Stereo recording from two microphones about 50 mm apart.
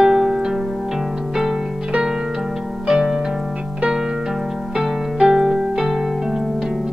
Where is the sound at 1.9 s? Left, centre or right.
Centre.